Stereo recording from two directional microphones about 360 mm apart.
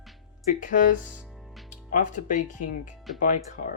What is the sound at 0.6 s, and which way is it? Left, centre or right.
Speech, left.